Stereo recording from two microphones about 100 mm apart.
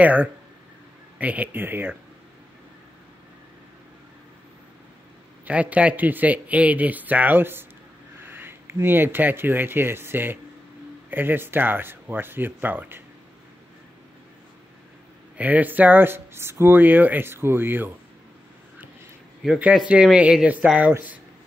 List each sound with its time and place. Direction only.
0.0 s speech: 15° right (ahead or behind)
5.4 s speech: 15° right (ahead or behind)
15.3 s speech: 15° right (ahead or behind)
19.9 s speech: 10° right (ahead or behind)